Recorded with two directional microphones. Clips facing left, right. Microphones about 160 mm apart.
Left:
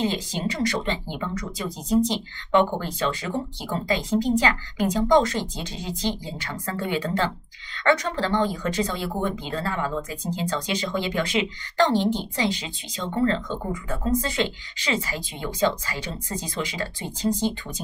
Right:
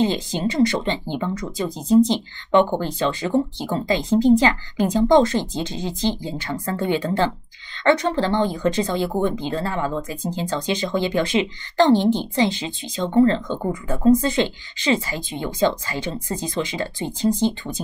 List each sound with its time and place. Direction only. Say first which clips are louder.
0.0 s speech: right 5 dB; 30° right (ahead or behind)